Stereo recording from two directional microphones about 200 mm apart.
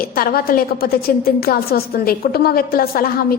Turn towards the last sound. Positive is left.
turn(degrees=45)  # may be behind; listen again after turning